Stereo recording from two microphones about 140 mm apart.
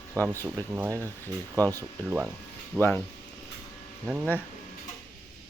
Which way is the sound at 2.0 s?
10° right (ahead or behind).